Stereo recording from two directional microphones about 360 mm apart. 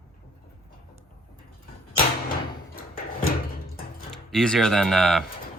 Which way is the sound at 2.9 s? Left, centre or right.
Left.